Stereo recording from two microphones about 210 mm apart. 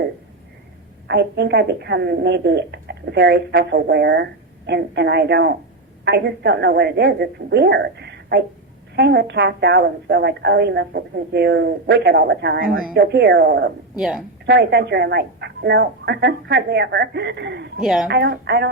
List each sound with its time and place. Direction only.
1.0 s a woman's voice: 55° right (ahead or behind)
13.9 s a woman's voice: centre (ahead or behind)
14.2 s a woman's voice: 50° right (ahead or behind)
17.7 s a woman's voice: 5° right (ahead or behind)
18.1 s a woman's voice: 50° right (ahead or behind)